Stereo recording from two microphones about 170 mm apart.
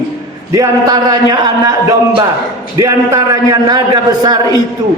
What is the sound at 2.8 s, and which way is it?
A man's voice, 20° right (ahead or behind).